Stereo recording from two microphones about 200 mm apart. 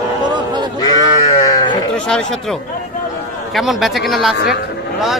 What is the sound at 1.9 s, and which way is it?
Speech, 5° left (ahead or behind).